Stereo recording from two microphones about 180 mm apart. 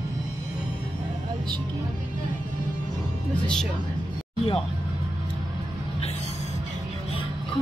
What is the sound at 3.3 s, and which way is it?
Speech, 5° left (ahead or behind).